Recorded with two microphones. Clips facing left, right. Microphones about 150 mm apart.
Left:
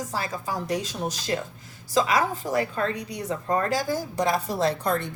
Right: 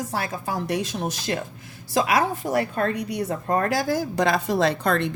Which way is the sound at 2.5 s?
55° right (ahead or behind).